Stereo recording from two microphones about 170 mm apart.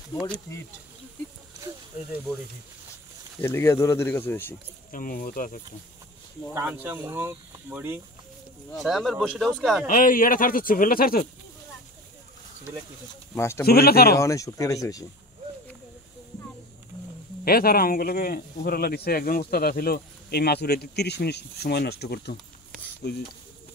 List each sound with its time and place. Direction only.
1.6 s speech: 15° right (ahead or behind)
3.3 s speech: 15° left (ahead or behind)
4.9 s speech: 55° left (ahead or behind)
6.5 s speech: 10° right (ahead or behind)
8.7 s speech: centre (ahead or behind)
9.8 s speech: 55° left (ahead or behind)
13.3 s speech: 15° left (ahead or behind)
13.7 s speech: 65° left (ahead or behind)
14.1 s speech: 20° left (ahead or behind)
17.5 s speech: 60° left (ahead or behind)